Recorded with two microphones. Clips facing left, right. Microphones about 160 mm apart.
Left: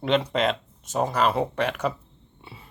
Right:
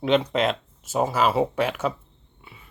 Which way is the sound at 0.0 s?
Centre (ahead or behind).